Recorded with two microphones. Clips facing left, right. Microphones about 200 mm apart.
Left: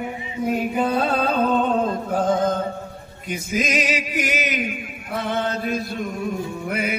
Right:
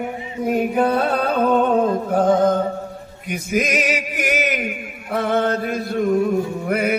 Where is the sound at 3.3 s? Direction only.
60° right (ahead or behind).